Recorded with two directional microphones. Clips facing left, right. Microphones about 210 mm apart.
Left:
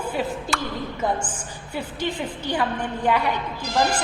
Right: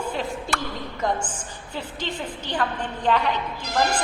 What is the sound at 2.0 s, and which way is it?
A woman's voice, 10° left (ahead or behind).